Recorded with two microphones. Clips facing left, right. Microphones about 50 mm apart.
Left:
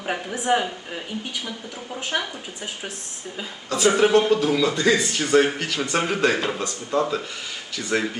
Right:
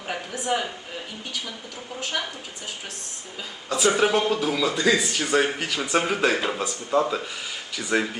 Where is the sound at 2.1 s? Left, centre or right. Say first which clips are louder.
Left 3 dB; centre.